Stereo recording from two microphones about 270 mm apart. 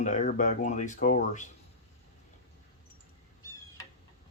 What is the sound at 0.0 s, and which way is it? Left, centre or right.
Speech, left.